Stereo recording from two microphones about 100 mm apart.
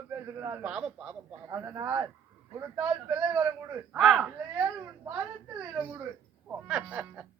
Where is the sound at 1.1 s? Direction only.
25° right (ahead or behind).